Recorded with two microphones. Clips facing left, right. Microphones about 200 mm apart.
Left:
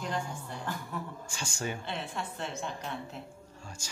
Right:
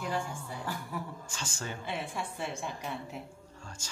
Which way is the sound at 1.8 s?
10° right (ahead or behind).